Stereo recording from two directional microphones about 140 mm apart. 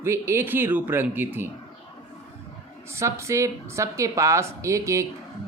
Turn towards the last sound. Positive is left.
turn(degrees=-20)  # may be behind; listen again after turning